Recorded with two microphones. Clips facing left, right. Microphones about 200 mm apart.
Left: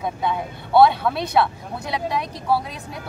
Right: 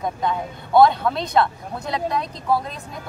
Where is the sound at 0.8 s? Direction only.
5° left (ahead or behind).